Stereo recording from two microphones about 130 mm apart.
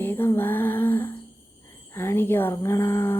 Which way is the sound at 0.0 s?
15° left (ahead or behind).